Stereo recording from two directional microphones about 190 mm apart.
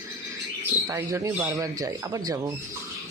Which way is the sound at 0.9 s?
15° right (ahead or behind).